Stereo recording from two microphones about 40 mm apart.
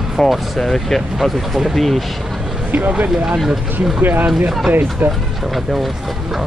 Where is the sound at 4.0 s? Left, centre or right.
Right.